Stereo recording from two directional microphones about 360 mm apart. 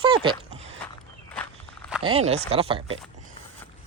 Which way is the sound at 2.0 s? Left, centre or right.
Centre.